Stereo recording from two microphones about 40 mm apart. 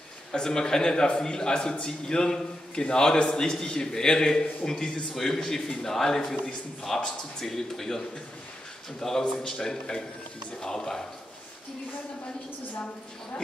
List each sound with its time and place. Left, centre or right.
0.3 s a man's voice: centre
9.2 s a man's voice: centre